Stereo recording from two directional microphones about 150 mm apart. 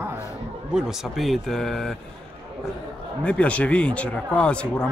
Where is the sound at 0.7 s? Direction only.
Centre (ahead or behind).